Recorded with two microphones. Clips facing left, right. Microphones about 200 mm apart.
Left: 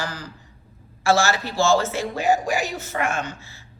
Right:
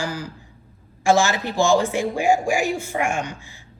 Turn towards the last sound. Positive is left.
turn(degrees=-15)  # may be behind; listen again after turning